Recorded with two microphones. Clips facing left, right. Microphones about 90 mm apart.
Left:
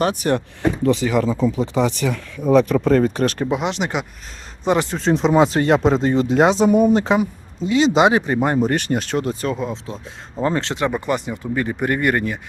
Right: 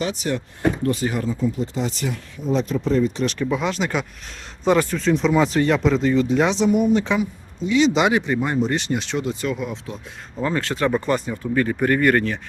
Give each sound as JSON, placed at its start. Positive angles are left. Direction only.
{"t": 0.0, "sound": "speech", "side_deg": 55}
{"t": 0.9, "sound": "speech", "side_deg": 90}
{"t": 3.5, "sound": "a man's voice", "side_deg": 20}
{"t": 4.9, "sound": "speech", "side_deg": 35}
{"t": 8.4, "sound": "speech", "side_deg": 50}